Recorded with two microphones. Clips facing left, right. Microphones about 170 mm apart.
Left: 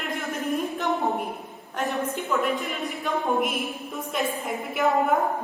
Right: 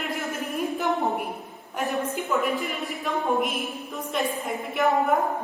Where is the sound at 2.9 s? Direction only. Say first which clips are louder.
Left 1 dB; centre (ahead or behind).